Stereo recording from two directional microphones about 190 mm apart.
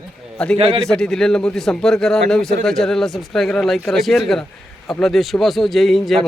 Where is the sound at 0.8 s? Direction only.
Centre (ahead or behind).